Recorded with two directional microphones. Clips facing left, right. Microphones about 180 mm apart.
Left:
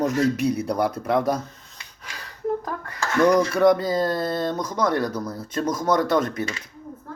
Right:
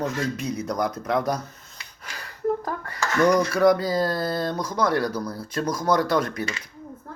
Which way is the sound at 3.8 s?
25° left (ahead or behind).